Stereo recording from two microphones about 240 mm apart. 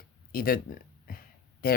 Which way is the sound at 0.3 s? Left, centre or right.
Left.